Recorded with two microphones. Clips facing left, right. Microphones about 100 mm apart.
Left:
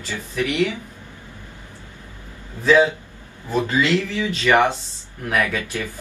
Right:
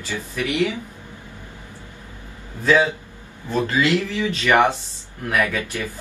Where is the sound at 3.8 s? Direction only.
15° right (ahead or behind).